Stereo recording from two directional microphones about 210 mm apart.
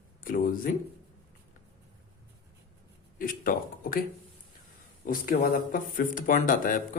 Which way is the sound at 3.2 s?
40° left (ahead or behind).